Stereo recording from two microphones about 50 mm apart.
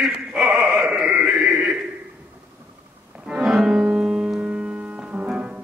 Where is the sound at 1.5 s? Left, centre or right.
Centre.